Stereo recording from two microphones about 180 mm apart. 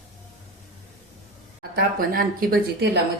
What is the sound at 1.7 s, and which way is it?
A woman's voice, 55° right (ahead or behind).